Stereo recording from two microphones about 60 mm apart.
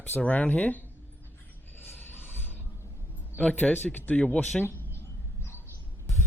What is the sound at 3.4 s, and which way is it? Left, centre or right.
Speech, left.